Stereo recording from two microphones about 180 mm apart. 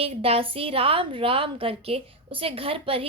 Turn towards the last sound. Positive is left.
turn(degrees=-30)  # may be behind; listen again after turning